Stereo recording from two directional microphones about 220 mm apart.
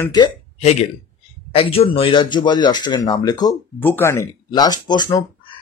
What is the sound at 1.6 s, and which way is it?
A man's voice, 25° left (ahead or behind).